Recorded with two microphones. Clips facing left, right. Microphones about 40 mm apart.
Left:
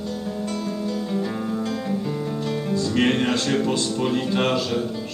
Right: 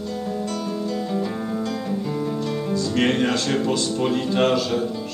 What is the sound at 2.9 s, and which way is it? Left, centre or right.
Music, centre.